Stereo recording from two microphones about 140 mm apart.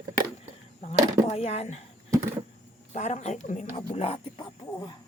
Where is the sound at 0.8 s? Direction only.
50° left (ahead or behind).